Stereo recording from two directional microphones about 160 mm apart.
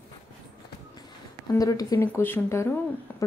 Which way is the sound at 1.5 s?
20° left (ahead or behind).